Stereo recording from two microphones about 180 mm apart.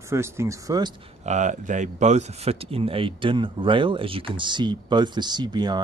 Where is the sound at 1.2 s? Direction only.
40° right (ahead or behind).